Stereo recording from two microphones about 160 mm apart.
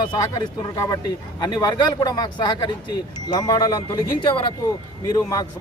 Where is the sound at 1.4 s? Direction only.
25° left (ahead or behind).